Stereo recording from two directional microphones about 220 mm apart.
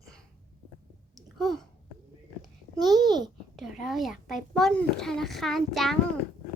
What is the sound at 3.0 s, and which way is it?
Babbling, 20° right (ahead or behind).